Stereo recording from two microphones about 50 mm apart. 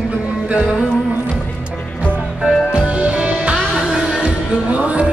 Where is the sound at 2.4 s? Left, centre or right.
Right.